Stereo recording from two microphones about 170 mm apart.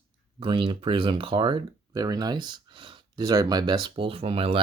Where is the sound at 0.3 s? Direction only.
30° right (ahead or behind).